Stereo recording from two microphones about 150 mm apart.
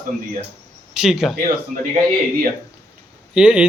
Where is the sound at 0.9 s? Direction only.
5° right (ahead or behind).